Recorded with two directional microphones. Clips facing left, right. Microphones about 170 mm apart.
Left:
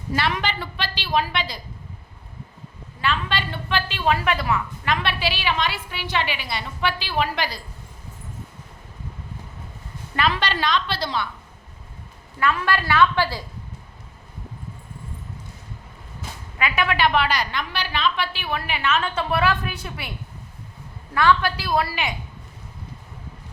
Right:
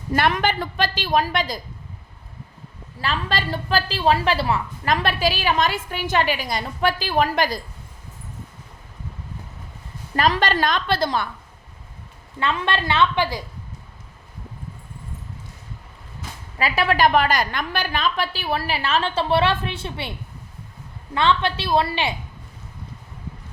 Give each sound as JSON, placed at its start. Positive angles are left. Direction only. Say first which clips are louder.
{"t": 0.1, "sound": "a woman's voice", "louder": "right 4 dB", "side_deg": -50}
{"t": 3.0, "sound": "a woman's voice", "louder": "even", "side_deg": -40}
{"t": 10.2, "sound": "a woman's voice", "louder": "right 4 dB", "side_deg": -40}
{"t": 12.4, "sound": "a woman's voice", "louder": "left 1 dB", "side_deg": -25}
{"t": 16.6, "sound": "a woman's voice", "louder": "right 3 dB", "side_deg": -35}